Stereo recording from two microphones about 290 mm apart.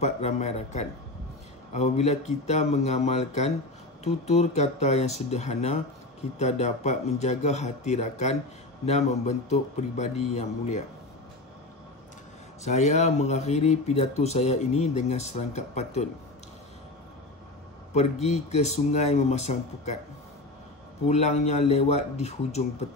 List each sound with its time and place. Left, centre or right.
0.0 s a man's voice: left
12.6 s speech: left
17.9 s speech: left
21.1 s speech: left